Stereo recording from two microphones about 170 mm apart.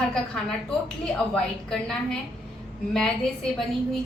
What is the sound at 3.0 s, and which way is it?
A woman's voice, 5° left (ahead or behind).